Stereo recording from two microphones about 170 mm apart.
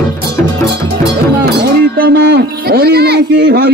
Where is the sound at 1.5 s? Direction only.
65° right (ahead or behind).